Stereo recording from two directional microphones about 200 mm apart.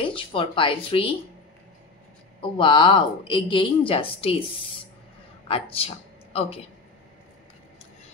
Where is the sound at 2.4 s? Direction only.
25° left (ahead or behind).